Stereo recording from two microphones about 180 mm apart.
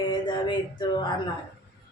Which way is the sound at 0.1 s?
25° left (ahead or behind).